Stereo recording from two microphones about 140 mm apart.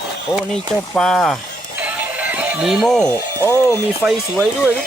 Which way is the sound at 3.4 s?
25° left (ahead or behind).